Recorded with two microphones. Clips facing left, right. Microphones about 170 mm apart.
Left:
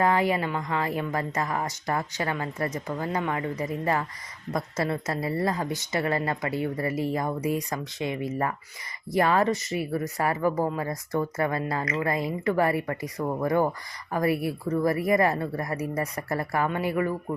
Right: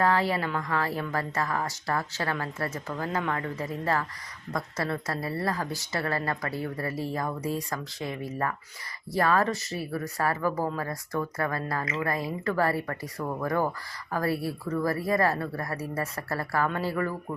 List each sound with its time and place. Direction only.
0.0 s a woman's voice: 15° left (ahead or behind)